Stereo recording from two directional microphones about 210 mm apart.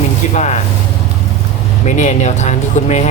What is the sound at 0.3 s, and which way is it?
Speech, 35° left (ahead or behind).